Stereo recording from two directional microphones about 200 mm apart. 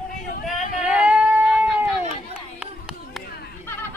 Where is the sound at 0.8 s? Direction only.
5° right (ahead or behind).